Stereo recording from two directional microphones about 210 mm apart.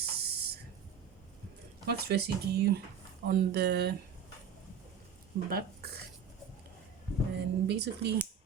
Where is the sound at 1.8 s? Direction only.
50° right (ahead or behind).